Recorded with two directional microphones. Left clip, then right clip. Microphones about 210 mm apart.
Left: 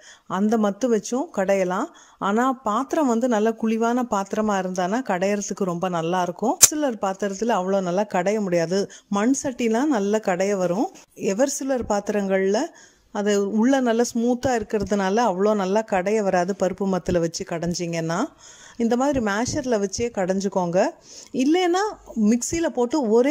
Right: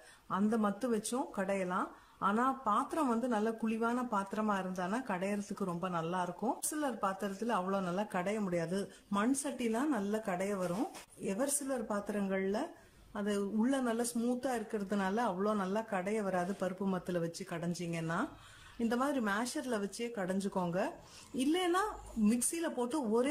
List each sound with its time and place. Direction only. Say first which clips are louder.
0.3 s speech: left 12 dB; 35° left (ahead or behind)